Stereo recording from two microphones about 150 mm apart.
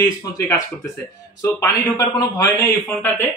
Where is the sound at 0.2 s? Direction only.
25° left (ahead or behind).